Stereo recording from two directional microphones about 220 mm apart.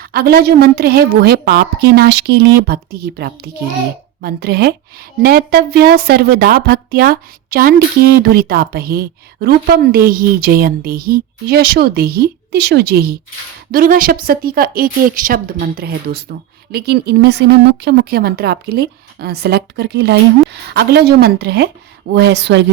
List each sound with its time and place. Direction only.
0.0 s speech: 45° right (ahead or behind)